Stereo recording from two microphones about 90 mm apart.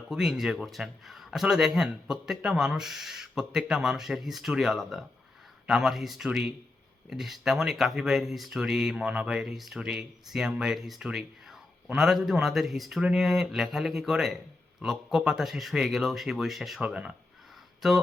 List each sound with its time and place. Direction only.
0.1 s speech: 5° right (ahead or behind)